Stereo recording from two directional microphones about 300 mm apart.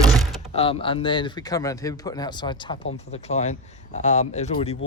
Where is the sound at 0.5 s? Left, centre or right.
Centre.